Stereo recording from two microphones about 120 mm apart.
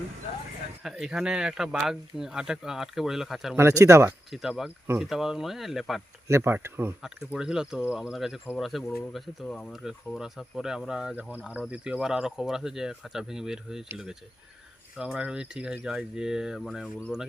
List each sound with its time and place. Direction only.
0.8 s speech: 5° right (ahead or behind)
3.5 s speech: 25° right (ahead or behind)
4.3 s speech: 5° right (ahead or behind)
6.2 s speech: 20° right (ahead or behind)
7.0 s speech: 5° right (ahead or behind)